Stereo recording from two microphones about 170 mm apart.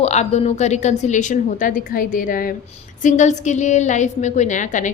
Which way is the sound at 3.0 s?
45° left (ahead or behind).